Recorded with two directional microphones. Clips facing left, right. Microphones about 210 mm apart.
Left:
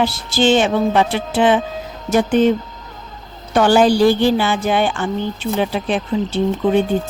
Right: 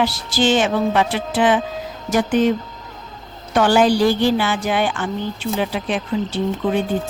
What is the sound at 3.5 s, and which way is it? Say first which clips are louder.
Speech: left 2 dB; 30° left (ahead or behind).